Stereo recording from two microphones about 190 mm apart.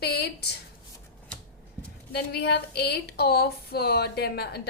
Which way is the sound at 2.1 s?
60° left (ahead or behind).